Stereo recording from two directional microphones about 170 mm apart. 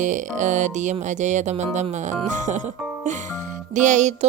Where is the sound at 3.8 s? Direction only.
45° right (ahead or behind).